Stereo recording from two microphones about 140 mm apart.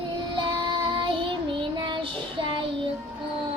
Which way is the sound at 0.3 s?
35° right (ahead or behind).